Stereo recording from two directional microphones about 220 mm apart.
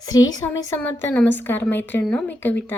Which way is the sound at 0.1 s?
15° left (ahead or behind).